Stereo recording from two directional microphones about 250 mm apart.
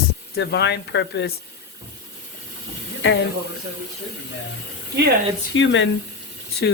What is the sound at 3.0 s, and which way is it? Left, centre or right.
Speech, left.